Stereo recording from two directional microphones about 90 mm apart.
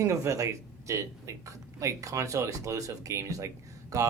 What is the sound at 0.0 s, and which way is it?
Speech, 35° right (ahead or behind).